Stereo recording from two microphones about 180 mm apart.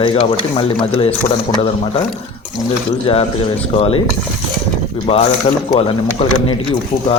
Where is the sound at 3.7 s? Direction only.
35° left (ahead or behind).